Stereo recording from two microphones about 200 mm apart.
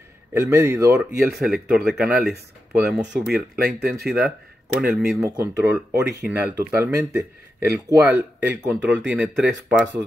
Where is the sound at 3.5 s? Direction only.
50° right (ahead or behind).